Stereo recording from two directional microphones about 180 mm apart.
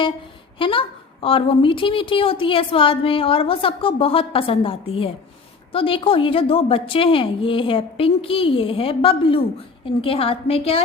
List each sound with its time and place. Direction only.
0.6 s a woman's voice: 30° left (ahead or behind)